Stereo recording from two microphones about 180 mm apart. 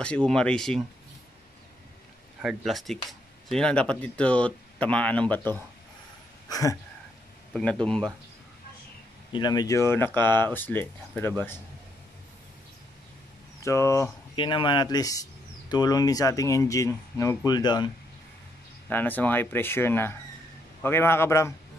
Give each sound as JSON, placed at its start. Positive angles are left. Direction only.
{"t": 0.0, "sound": "speech", "side_deg": 5}
{"t": 2.4, "sound": "speech", "side_deg": 0}
{"t": 7.5, "sound": "speech", "side_deg": 5}
{"t": 9.3, "sound": "speech", "side_deg": 20}
{"t": 13.6, "sound": "speech", "side_deg": 15}
{"t": 14.3, "sound": "speech", "side_deg": 25}
{"t": 18.9, "sound": "speech", "side_deg": 10}